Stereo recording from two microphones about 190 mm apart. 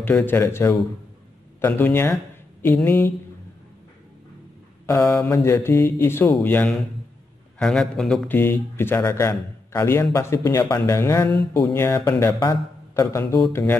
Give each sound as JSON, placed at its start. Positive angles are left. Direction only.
{"t": 0.0, "sound": "speech", "side_deg": 10}
{"t": 4.8, "sound": "speech", "side_deg": 20}